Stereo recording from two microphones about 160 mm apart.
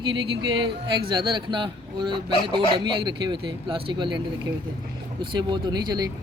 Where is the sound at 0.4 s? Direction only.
30° right (ahead or behind).